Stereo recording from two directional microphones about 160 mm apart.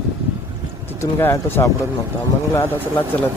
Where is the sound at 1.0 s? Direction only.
15° left (ahead or behind).